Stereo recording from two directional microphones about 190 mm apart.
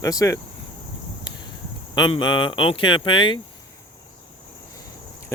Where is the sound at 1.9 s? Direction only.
25° left (ahead or behind).